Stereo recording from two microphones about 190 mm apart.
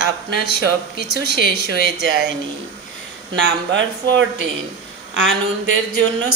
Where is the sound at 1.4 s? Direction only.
50° left (ahead or behind).